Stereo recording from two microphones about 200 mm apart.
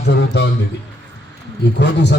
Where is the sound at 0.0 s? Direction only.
60° left (ahead or behind).